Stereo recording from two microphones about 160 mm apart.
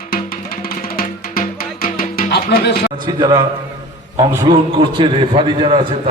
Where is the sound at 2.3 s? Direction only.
90° left.